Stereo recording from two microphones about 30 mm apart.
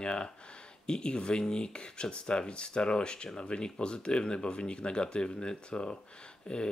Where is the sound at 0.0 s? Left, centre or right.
Left.